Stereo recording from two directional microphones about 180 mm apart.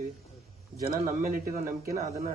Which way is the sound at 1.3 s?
50° right (ahead or behind).